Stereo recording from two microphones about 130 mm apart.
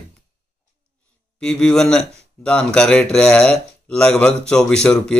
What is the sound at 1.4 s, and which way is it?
Speech, 5° left (ahead or behind).